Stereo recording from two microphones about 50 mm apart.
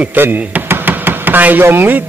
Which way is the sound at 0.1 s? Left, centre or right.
Right.